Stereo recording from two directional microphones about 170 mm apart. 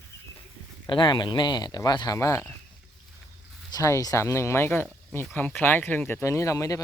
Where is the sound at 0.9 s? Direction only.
25° left (ahead or behind).